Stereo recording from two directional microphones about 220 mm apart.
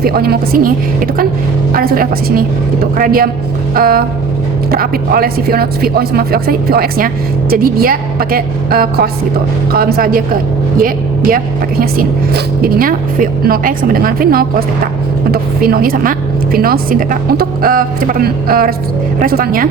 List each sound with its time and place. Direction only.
0.0 s speech: 45° right (ahead or behind)
1.7 s a woman's voice: 40° right (ahead or behind)